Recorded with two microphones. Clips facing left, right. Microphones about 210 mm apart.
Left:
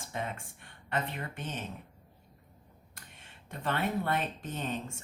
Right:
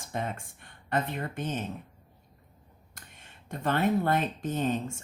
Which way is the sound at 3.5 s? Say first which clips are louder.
Right 6 dB; 40° right (ahead or behind).